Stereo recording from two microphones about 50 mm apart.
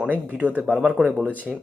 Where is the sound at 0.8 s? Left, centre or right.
Centre.